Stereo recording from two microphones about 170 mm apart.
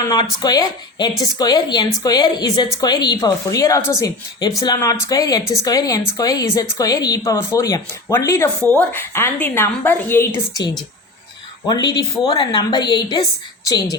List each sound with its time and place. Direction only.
0.0 s a woman's voice: 25° left (ahead or behind)
11.6 s speech: 25° left (ahead or behind)